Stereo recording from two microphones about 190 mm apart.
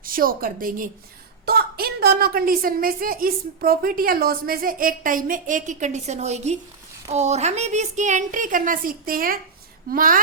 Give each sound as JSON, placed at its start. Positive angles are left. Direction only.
{"t": 0.0, "sound": "a woman's voice", "side_deg": -50}